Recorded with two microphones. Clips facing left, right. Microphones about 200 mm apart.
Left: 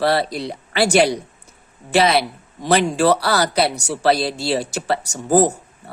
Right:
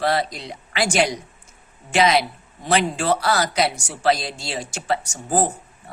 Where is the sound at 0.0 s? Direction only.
35° left (ahead or behind).